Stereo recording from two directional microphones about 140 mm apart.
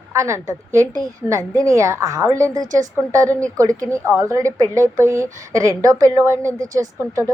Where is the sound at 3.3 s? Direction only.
10° left (ahead or behind).